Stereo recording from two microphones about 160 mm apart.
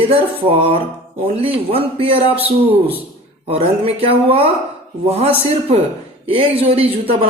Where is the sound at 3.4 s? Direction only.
40° right (ahead or behind).